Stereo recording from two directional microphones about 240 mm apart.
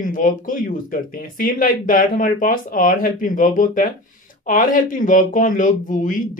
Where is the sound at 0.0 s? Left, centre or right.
Left.